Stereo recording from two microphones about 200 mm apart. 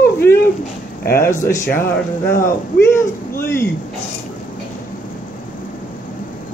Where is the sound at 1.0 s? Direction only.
50° left (ahead or behind).